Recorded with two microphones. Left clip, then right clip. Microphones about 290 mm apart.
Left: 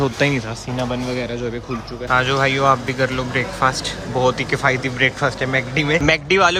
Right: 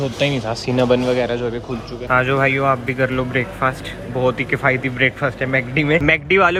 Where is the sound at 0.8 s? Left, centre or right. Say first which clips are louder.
Right 8 dB; right.